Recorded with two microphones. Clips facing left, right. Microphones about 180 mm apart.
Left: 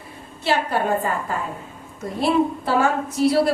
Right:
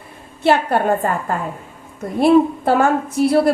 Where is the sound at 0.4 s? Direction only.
55° right (ahead or behind).